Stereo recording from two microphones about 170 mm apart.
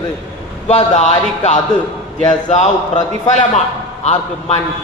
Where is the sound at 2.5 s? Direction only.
45° left (ahead or behind).